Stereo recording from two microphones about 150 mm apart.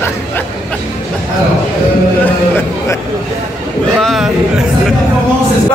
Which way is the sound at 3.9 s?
Centre (ahead or behind).